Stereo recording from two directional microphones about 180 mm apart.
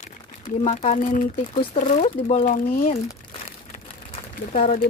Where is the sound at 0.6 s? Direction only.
35° left (ahead or behind).